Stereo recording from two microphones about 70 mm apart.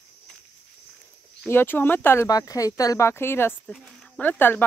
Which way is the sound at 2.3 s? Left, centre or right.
Left.